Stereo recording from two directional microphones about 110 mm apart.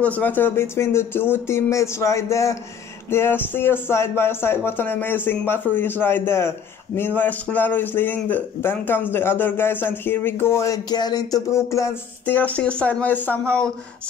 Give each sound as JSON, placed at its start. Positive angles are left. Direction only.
{"t": 0.0, "sound": "a man's voice", "side_deg": 15}
{"t": 10.9, "sound": "a sound", "side_deg": 40}
{"t": 12.3, "sound": "a man's voice", "side_deg": 15}